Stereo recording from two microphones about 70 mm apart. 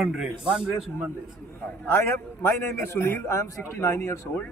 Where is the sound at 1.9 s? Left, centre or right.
Left.